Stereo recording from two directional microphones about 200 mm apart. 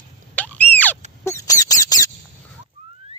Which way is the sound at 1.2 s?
15° left (ahead or behind).